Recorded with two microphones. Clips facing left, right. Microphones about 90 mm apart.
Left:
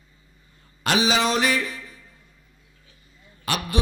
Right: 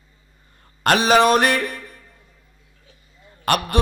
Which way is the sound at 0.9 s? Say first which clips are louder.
Right 7 dB; 55° right (ahead or behind).